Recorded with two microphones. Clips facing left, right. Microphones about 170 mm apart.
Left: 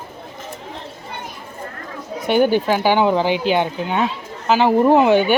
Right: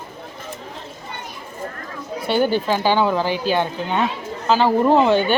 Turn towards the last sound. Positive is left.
turn(degrees=15)  # may be behind; listen again after turning